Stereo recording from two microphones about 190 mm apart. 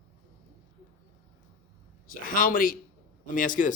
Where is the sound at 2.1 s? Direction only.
45° left (ahead or behind).